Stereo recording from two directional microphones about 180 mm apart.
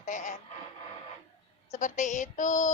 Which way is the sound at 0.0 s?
45° left (ahead or behind).